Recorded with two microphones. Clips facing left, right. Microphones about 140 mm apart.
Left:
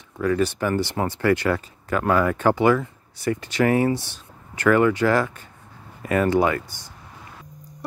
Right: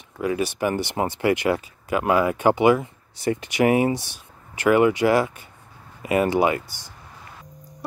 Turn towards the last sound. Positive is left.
turn(degrees=-15)  # may be behind; listen again after turning